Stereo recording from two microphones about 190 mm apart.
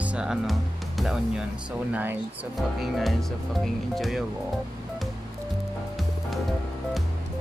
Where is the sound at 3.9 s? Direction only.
Centre (ahead or behind).